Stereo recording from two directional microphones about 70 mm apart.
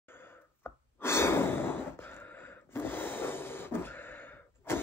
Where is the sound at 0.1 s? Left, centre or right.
Left.